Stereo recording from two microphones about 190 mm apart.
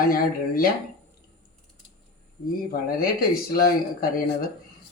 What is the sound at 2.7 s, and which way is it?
Speech, 50° left (ahead or behind).